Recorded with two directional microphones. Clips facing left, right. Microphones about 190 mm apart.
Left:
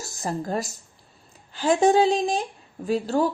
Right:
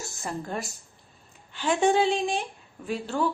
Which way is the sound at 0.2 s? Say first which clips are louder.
Left 6 dB; 40° left (ahead or behind).